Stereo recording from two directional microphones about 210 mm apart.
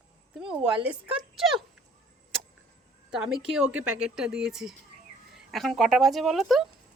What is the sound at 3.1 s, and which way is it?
A woman's voice, centre (ahead or behind).